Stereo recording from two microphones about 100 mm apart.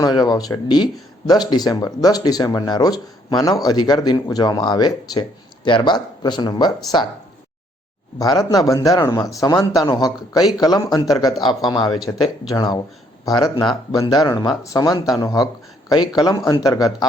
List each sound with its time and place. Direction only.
0.0 s speech: 45° left (ahead or behind)
8.2 s speech: 35° left (ahead or behind)